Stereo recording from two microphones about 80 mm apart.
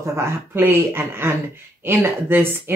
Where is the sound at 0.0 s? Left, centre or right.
Right.